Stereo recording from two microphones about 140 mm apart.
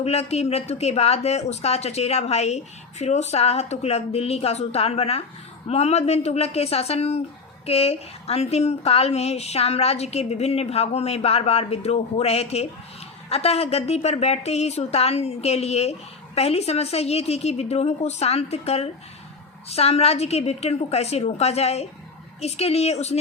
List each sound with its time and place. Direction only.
0.0 s a woman's voice: 45° left (ahead or behind)